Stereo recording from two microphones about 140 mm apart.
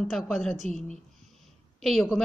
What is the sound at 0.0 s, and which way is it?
A woman's voice, centre (ahead or behind).